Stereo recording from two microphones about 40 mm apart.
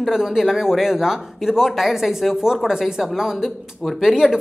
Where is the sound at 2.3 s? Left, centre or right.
Centre.